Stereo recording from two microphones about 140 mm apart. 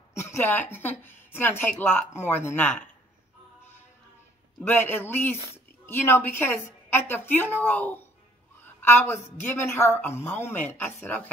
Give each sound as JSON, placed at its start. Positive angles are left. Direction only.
{"t": 0.1, "sound": "a woman's voice", "side_deg": 20}
{"t": 4.7, "sound": "a woman's voice", "side_deg": 15}